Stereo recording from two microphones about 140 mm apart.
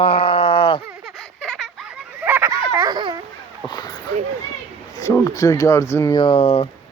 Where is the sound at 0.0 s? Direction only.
40° left (ahead or behind).